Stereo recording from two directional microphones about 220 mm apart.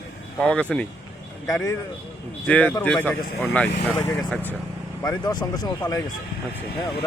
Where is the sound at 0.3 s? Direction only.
5° left (ahead or behind).